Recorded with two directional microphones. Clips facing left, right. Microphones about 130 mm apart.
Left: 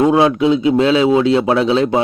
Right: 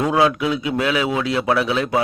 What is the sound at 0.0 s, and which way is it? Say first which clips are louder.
A man's voice: left 6 dB; 25° left (ahead or behind).